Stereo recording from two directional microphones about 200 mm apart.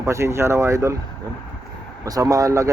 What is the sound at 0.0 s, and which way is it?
Speech, 15° right (ahead or behind).